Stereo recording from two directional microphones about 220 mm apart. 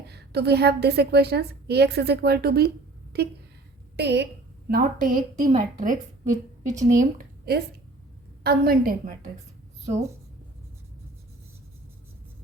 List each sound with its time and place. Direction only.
0.1 s a woman's voice: 50° right (ahead or behind)
4.7 s a woman's voice: 35° right (ahead or behind)
7.0 s a woman's voice: 45° right (ahead or behind)